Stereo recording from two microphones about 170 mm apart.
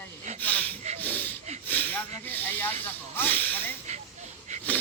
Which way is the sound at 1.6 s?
10° left (ahead or behind).